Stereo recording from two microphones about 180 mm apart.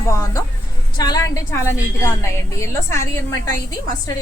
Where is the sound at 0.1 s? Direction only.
15° left (ahead or behind).